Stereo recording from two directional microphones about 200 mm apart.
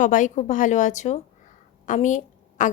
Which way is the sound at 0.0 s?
40° left (ahead or behind).